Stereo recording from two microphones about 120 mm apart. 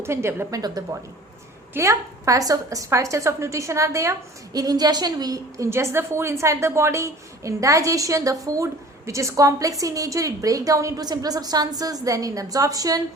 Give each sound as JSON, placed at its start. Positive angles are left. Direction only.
{"t": 0.0, "sound": "a woman's voice", "side_deg": -20}
{"t": 0.6, "sound": "a woman's voice", "side_deg": -35}